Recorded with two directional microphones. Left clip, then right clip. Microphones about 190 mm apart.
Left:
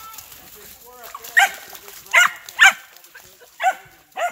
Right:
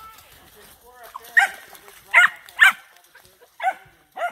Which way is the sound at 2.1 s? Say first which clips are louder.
Even; 50° left (ahead or behind).